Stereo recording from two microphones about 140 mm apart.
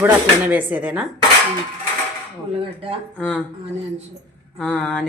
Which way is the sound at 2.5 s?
40° right (ahead or behind).